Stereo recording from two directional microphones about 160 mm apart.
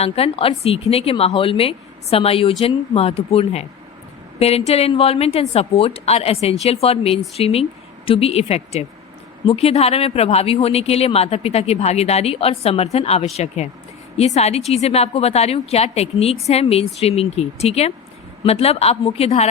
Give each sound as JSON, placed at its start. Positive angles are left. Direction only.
{"t": 0.0, "sound": "a woman's voice", "side_deg": 35}